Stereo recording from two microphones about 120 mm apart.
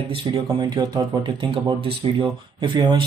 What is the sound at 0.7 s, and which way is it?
Speech, 35° right (ahead or behind).